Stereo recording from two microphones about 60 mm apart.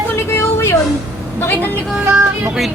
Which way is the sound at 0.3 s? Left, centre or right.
Left.